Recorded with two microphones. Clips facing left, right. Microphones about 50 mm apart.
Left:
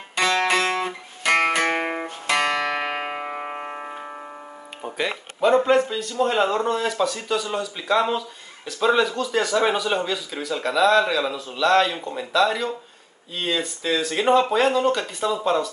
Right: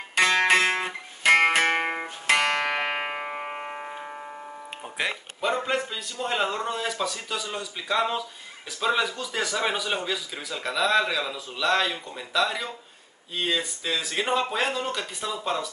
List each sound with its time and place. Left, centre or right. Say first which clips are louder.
0.2 s music: even; right
1.8 s music: left 2 dB; centre
2.2 s music: left 1 dB; right
3.1 s music: left 2 dB; centre
4.8 s music: left 7 dB; centre
5.4 s speech: left 9 dB; centre
12.0 s speech: left 8 dB; centre
12.3 s speech: left 5 dB; centre